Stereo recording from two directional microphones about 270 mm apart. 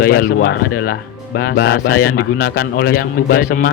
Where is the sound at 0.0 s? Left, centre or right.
Left.